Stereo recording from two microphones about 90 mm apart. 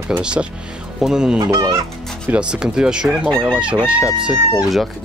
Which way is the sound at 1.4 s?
40° right (ahead or behind).